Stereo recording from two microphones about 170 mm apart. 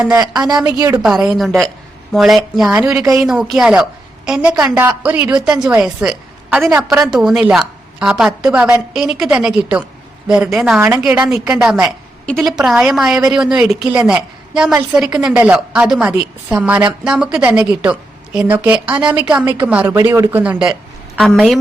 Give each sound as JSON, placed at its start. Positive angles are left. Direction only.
{"t": 0.2, "sound": "speech", "side_deg": -20}
{"t": 1.0, "sound": "a woman's voice", "side_deg": -5}